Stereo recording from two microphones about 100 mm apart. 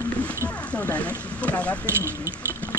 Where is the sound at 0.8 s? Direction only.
15° left (ahead or behind).